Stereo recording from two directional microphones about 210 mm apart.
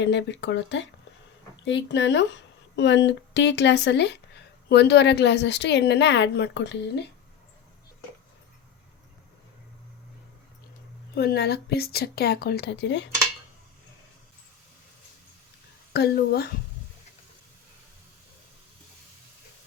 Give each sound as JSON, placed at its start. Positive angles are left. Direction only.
{"t": 0.0, "sound": "a woman's voice", "side_deg": 60}
{"t": 11.1, "sound": "speech", "side_deg": 50}
{"t": 15.9, "sound": "speech", "side_deg": 50}